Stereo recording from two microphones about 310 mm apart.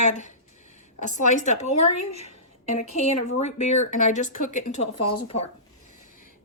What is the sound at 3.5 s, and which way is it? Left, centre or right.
Speech, left.